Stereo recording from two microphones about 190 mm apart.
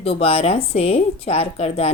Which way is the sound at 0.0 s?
30° left (ahead or behind).